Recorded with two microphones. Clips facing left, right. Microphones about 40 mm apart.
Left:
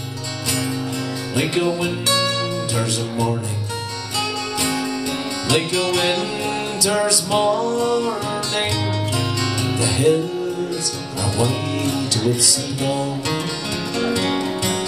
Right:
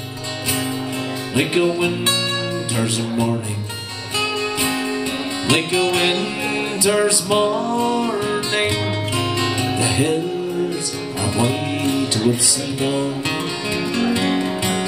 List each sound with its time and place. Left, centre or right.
1.3 s music: right
4.6 s music: right
11.3 s speech: right
12.8 s music: right